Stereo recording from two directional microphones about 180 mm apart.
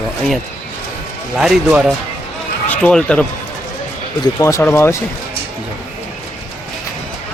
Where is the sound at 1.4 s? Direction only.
5° right (ahead or behind).